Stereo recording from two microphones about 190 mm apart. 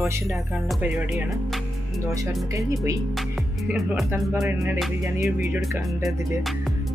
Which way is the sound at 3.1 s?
Centre (ahead or behind).